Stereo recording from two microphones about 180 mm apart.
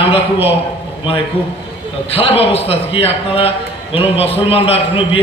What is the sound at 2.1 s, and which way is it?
A man's voice, 30° left (ahead or behind).